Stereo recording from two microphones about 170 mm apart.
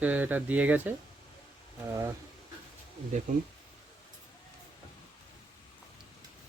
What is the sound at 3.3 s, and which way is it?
Speech, 50° right (ahead or behind).